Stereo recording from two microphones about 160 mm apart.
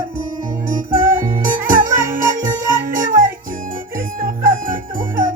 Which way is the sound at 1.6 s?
60° right (ahead or behind).